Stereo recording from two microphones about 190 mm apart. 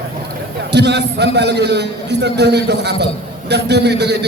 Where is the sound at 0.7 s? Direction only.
60° right (ahead or behind).